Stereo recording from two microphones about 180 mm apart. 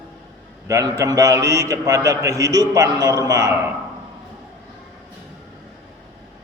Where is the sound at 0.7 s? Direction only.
20° right (ahead or behind).